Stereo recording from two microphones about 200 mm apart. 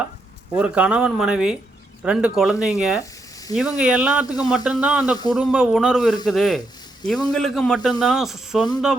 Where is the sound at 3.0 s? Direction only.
15° left (ahead or behind).